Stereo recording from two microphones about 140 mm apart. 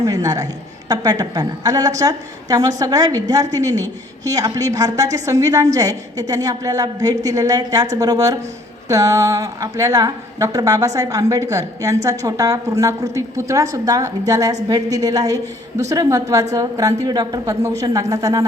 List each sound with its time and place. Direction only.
0.0 s a woman's voice: 25° right (ahead or behind)